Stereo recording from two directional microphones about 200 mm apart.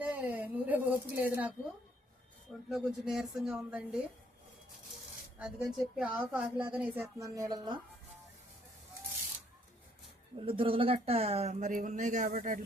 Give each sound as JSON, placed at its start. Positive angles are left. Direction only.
{"t": 0.0, "sound": "a sound", "side_deg": -10}
{"t": 2.6, "sound": "speech", "side_deg": 0}
{"t": 5.4, "sound": "a woman's voice", "side_deg": -5}
{"t": 10.3, "sound": "speech", "side_deg": -25}